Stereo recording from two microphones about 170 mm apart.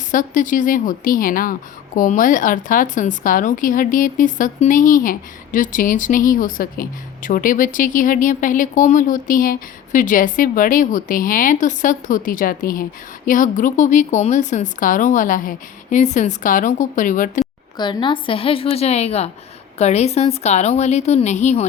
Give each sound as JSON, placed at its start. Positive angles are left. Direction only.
{"t": 0.1, "sound": "a woman's voice", "side_deg": 50}
{"t": 17.7, "sound": "a woman's voice", "side_deg": 25}